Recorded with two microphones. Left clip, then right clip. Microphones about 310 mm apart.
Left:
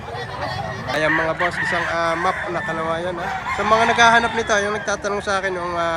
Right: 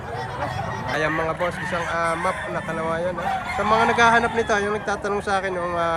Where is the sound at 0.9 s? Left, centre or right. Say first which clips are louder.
Left 5 dB; centre.